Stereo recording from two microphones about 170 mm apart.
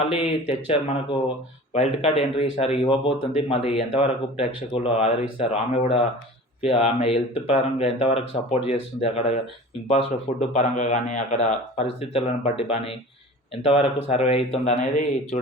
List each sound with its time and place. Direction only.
0.1 s speech: 35° left (ahead or behind)
11.9 s speech: 35° left (ahead or behind)